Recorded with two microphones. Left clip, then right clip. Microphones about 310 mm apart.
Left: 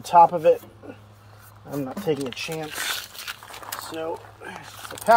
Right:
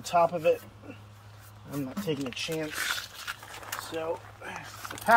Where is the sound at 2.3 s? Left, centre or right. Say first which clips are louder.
Left 2 dB; left.